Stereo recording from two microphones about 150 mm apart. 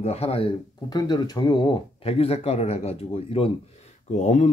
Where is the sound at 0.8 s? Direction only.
25° left (ahead or behind).